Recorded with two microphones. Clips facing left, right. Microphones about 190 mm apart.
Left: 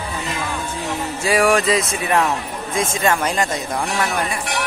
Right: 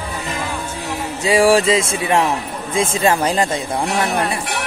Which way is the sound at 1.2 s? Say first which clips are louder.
Right 4 dB; 25° right (ahead or behind).